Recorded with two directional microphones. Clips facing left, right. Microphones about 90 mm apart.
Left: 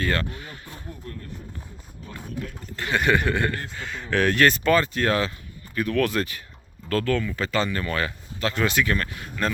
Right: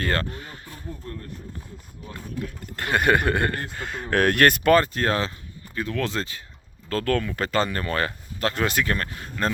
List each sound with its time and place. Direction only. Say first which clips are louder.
0.0 s speech: even; 40° right (ahead or behind)
2.7 s speech: right 1 dB; 50° right (ahead or behind); by 5.3 s 35° right (ahead or behind)
5.7 s speech: left 4 dB; 20° right (ahead or behind)
7.0 s speech: right 3 dB; 50° right (ahead or behind)